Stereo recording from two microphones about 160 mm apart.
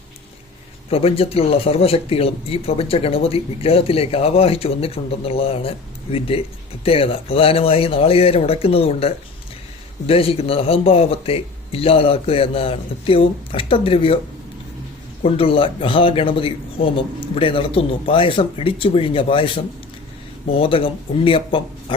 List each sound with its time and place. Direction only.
0.9 s speech: 35° left (ahead or behind)
15.2 s speech: 35° left (ahead or behind)